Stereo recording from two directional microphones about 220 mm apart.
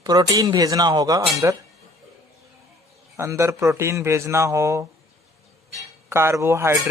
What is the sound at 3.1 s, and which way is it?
Speech, 15° right (ahead or behind).